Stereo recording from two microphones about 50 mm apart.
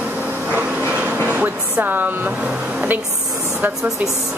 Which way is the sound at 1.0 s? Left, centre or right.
Right.